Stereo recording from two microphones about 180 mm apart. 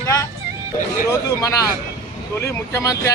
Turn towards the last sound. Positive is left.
turn(degrees=15)  # may be behind; listen again after turning